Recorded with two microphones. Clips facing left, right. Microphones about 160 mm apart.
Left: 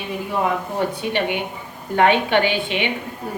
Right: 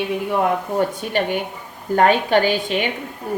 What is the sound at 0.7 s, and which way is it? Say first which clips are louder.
A woman's voice: right 2 dB; 45° right (ahead or behind).